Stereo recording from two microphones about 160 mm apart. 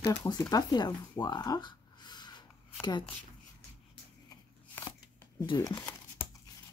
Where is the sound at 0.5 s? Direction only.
25° left (ahead or behind).